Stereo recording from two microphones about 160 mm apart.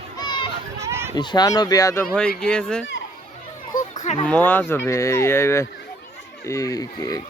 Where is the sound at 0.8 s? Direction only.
15° right (ahead or behind).